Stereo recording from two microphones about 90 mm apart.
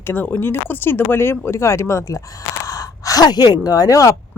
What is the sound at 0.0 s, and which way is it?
A woman's voice, 25° left (ahead or behind).